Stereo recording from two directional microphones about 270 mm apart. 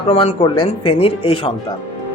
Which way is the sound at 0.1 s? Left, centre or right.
Left.